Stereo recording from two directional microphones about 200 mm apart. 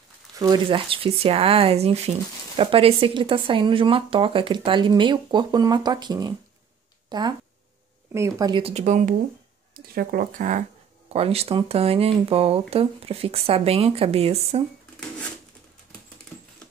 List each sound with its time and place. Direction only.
0.4 s speech: 25° right (ahead or behind)